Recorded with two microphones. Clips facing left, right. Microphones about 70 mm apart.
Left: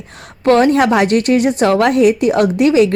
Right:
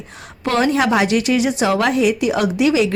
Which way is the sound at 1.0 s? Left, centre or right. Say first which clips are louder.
Left 4 dB; left.